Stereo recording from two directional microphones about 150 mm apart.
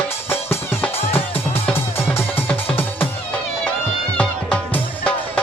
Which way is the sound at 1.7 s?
15° left (ahead or behind).